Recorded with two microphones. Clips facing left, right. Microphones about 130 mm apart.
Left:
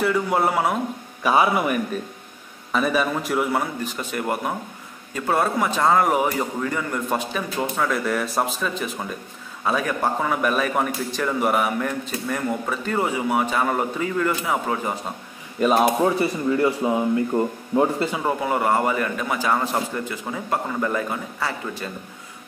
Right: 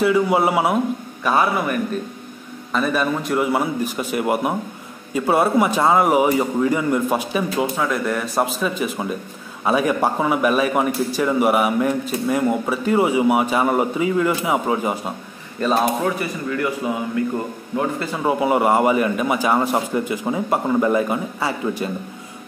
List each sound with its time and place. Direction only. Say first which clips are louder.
0.0 s a man's voice: right 4 dB; 5° right (ahead or behind)
1.2 s a man's voice: even; 10° left (ahead or behind)
3.5 s a man's voice: right 4 dB; 10° right (ahead or behind)
15.6 s a man's voice: left 1 dB; 15° left (ahead or behind)
16.2 s speech: left 3 dB; 25° left (ahead or behind)
18.2 s a man's voice: right 7 dB; 15° right (ahead or behind)